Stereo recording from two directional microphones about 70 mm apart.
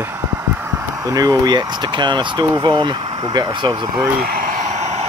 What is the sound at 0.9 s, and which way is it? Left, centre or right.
Speech, right.